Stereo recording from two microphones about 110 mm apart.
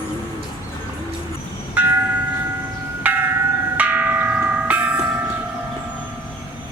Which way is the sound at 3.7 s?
15° right (ahead or behind).